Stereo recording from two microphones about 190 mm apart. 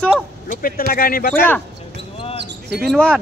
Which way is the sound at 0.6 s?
50° left (ahead or behind).